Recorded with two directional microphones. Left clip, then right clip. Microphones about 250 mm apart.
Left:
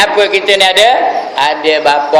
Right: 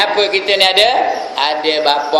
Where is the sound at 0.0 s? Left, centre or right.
Centre.